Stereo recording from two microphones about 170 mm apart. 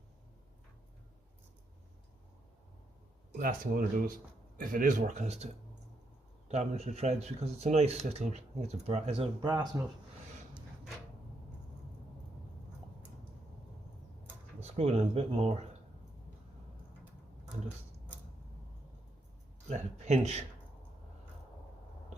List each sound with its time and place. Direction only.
3.3 s speech: 55° right (ahead or behind); by 5.5 s 40° right (ahead or behind)
6.5 s speech: 40° right (ahead or behind)
9.4 s speech: 25° right (ahead or behind)
14.6 s speech: 40° right (ahead or behind)
19.6 s speech: 40° right (ahead or behind)